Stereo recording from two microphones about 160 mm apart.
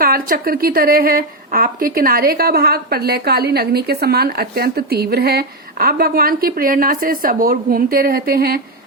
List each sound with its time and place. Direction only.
0.0 s a woman's voice: 70° right (ahead or behind)